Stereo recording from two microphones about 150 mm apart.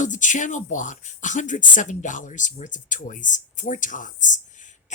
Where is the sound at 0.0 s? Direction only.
55° left (ahead or behind).